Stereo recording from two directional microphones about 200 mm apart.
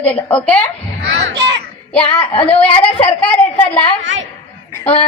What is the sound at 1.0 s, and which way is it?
Speech, 65° right (ahead or behind).